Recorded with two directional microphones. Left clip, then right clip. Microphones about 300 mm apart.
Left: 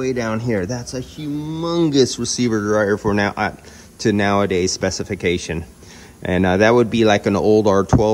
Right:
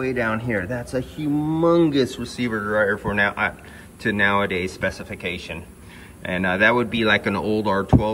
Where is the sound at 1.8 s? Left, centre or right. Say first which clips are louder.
Left 5 dB; centre.